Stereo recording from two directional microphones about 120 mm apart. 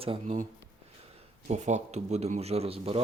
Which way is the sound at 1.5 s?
75° right (ahead or behind).